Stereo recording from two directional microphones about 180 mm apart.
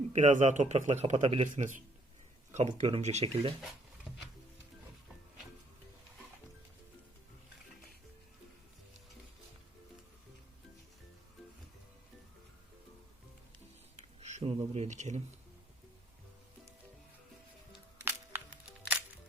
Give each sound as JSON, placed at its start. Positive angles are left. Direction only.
{"t": 0.1, "sound": "a man's voice", "side_deg": -40}
{"t": 13.9, "sound": "a sound", "side_deg": -40}
{"t": 18.0, "sound": "music", "side_deg": -10}